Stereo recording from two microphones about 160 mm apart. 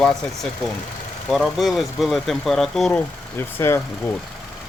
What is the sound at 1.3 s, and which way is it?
Speech, centre (ahead or behind).